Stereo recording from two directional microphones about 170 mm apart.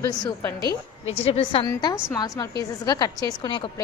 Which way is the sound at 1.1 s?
35° left (ahead or behind).